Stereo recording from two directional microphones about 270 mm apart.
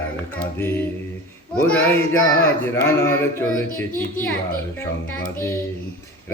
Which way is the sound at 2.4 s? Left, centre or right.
Centre.